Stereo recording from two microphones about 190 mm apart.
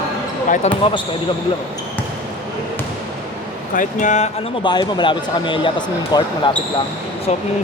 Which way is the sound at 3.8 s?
40° left (ahead or behind).